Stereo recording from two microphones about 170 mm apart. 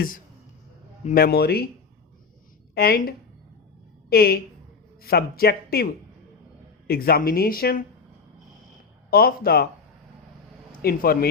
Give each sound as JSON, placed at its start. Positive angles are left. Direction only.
{"t": 1.1, "sound": "speech", "side_deg": 65}
{"t": 2.7, "sound": "speech", "side_deg": 65}
{"t": 9.0, "sound": "speech", "side_deg": 60}
{"t": 10.7, "sound": "a man's voice", "side_deg": 60}